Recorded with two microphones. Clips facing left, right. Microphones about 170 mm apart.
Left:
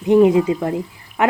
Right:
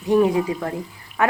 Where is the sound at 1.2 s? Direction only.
20° left (ahead or behind).